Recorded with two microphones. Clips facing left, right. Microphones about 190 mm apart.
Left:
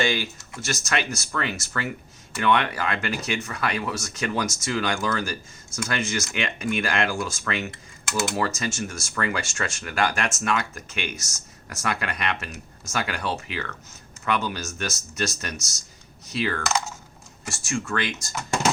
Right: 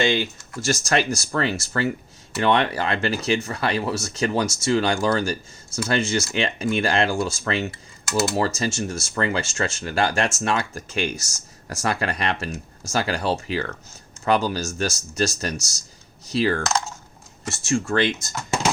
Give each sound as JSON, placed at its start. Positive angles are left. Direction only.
{"t": 0.0, "sound": "speech", "side_deg": -25}